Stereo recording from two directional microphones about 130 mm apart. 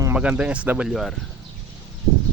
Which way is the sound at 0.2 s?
10° right (ahead or behind).